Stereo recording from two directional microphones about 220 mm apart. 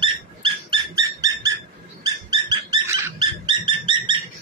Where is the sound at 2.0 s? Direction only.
20° right (ahead or behind).